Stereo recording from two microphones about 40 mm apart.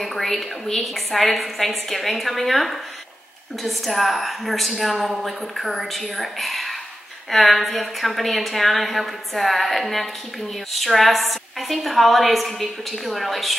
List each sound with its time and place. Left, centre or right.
0.0 s a woman's voice: centre